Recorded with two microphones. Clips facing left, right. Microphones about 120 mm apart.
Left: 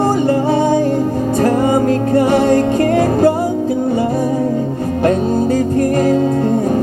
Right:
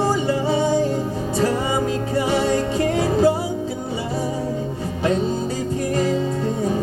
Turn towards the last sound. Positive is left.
turn(degrees=55)  # may be behind; listen again after turning